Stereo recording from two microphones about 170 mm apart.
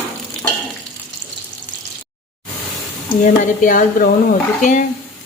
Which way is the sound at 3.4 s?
50° left (ahead or behind).